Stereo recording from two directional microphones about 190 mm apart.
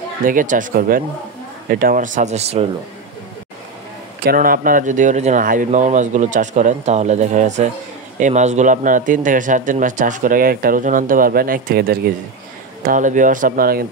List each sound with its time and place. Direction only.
0.2 s speech: 45° right (ahead or behind)
4.2 s speech: 50° right (ahead or behind)